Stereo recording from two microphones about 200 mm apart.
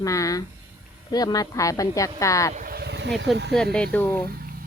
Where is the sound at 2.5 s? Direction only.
45° right (ahead or behind).